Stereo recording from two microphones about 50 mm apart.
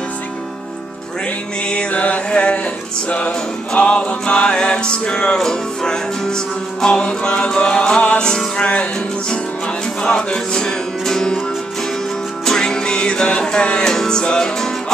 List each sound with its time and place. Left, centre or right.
1.7 s music: left
10.0 s music: centre
12.4 s music: centre